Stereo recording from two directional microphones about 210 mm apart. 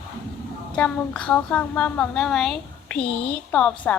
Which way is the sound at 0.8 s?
5° left (ahead or behind).